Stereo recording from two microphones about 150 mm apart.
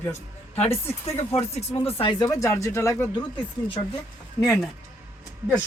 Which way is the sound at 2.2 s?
20° left (ahead or behind).